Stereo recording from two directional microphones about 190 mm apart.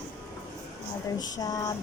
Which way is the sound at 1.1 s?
20° left (ahead or behind).